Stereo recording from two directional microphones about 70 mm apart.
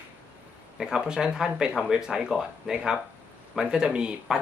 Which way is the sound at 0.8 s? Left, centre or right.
Centre.